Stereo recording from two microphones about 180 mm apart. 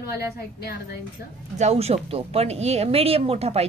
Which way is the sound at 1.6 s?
35° right (ahead or behind).